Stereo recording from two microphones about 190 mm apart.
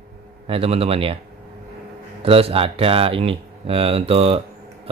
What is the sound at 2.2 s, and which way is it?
Speech, 30° right (ahead or behind).